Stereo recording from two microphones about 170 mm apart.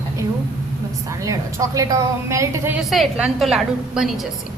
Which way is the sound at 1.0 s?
20° right (ahead or behind).